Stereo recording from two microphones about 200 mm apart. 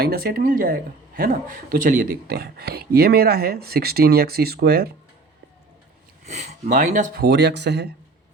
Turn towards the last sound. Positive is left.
turn(degrees=-55)  # may be behind; listen again after turning